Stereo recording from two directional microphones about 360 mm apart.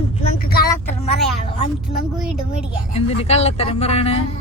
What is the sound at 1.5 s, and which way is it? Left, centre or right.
Speech, centre.